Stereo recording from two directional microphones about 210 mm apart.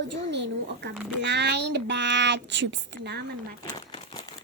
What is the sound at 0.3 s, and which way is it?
A child's voice, 55° right (ahead or behind).